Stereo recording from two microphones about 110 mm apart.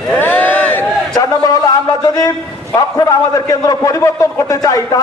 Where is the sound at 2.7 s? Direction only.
30° left (ahead or behind).